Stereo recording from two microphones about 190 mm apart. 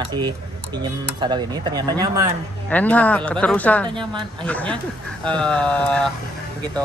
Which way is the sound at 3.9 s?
25° right (ahead or behind).